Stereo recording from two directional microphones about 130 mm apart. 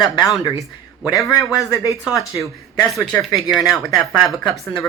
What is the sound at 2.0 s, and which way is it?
Speech, centre (ahead or behind).